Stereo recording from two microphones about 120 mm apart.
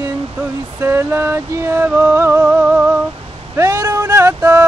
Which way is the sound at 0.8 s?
20° right (ahead or behind).